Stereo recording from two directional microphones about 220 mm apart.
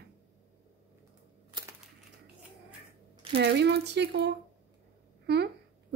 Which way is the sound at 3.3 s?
50° right (ahead or behind).